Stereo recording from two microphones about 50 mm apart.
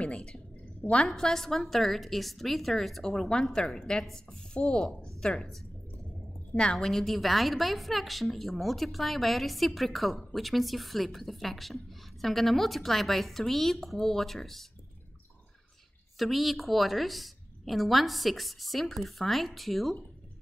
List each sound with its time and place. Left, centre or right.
0.0 s a sound: centre
1.0 s a woman's voice: centre
4.8 s a woman's voice: centre
6.5 s a woman's voice: centre
16.2 s a woman's voice: centre